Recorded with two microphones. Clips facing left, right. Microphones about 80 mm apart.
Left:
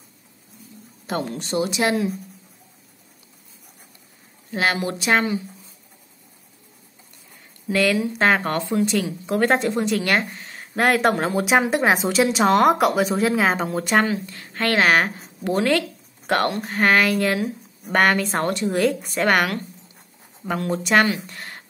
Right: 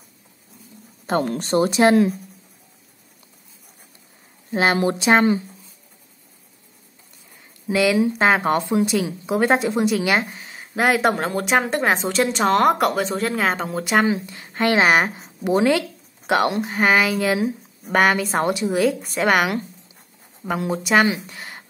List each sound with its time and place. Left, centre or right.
1.2 s speech: right
4.5 s speech: right
7.6 s a woman's voice: centre
14.0 s a woman's voice: centre
21.3 s a sound: centre